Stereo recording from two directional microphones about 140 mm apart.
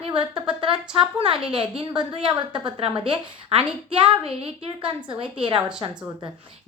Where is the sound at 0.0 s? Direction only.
35° right (ahead or behind).